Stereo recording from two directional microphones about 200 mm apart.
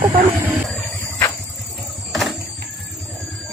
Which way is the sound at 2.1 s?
Centre (ahead or behind).